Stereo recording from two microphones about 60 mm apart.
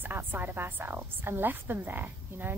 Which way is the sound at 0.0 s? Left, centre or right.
Right.